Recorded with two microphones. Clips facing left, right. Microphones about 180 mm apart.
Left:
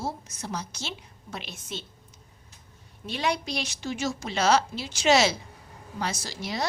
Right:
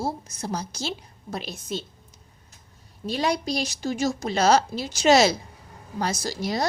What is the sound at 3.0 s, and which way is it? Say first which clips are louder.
Speech: right 4 dB; 35° right (ahead or behind).